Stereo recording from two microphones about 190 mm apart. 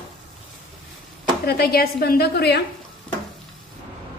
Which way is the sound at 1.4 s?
55° left (ahead or behind).